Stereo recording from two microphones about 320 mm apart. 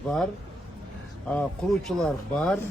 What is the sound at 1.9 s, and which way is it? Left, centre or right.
Speech, centre.